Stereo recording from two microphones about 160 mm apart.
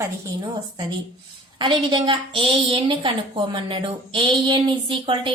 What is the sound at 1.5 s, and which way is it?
A woman's voice, 30° right (ahead or behind).